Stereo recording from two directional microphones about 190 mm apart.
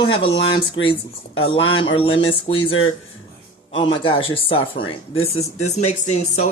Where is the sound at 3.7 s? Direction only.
30° left (ahead or behind).